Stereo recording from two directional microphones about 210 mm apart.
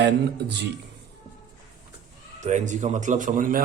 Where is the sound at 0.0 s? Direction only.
55° right (ahead or behind).